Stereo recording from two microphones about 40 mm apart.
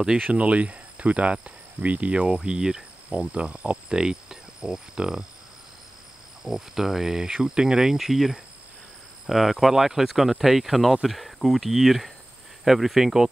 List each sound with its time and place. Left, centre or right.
0.2 s speech: right
1.8 s speech: right; by 5.2 s centre
6.4 s speech: centre